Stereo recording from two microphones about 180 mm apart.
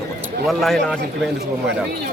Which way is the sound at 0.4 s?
Centre (ahead or behind).